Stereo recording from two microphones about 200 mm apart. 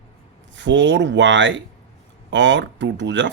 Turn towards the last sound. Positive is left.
turn(degrees=-65)  # may be behind; listen again after turning